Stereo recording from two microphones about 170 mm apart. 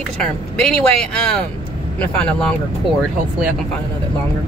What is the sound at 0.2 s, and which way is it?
Speech, 5° left (ahead or behind).